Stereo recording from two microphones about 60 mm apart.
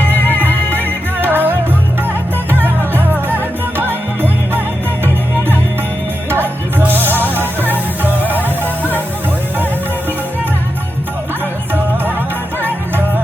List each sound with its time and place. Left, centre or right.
0.0 s music: left
1.2 s music: right
6.3 s music: right